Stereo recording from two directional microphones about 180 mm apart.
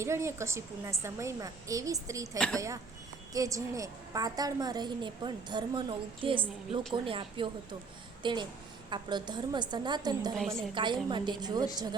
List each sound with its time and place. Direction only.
0.0 s a woman's voice: 15° right (ahead or behind)
10.3 s a woman's voice: centre (ahead or behind)
10.8 s a woman's voice: 25° right (ahead or behind)